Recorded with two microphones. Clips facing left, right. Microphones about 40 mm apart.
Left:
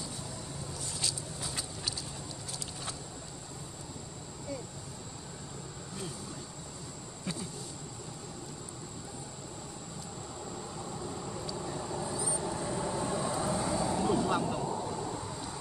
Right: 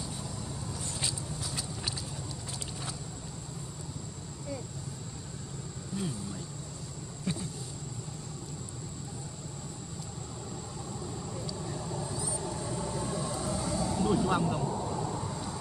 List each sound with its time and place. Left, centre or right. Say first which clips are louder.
7.3 s insect: right 4 dB; centre
11.4 s vehicle: left 1 dB; centre
14.0 s a sound: right 4 dB; centre